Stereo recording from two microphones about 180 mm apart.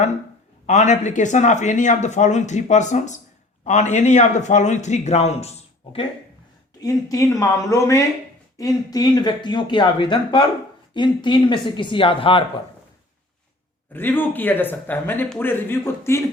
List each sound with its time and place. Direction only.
0.7 s speech: 40° left (ahead or behind)
6.8 s speech: 20° left (ahead or behind)
13.9 s speech: 10° left (ahead or behind)